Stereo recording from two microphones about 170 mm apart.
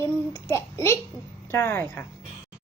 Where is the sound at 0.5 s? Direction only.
15° left (ahead or behind).